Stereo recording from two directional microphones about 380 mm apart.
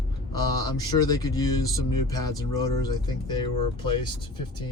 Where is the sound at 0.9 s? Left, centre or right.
Centre.